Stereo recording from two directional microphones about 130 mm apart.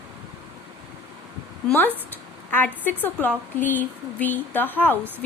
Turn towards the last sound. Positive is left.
turn(degrees=15)  # may be behind; listen again after turning